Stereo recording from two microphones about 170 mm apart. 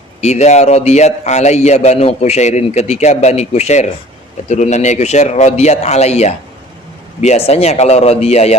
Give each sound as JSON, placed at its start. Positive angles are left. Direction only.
{"t": 0.2, "sound": "a man's voice", "side_deg": 40}